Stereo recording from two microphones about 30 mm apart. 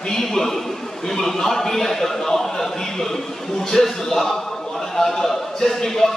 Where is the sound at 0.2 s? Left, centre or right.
Centre.